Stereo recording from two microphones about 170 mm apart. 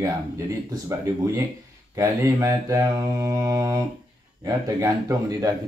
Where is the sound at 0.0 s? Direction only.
20° right (ahead or behind).